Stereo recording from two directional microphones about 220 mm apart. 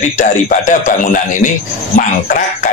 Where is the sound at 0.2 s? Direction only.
35° left (ahead or behind).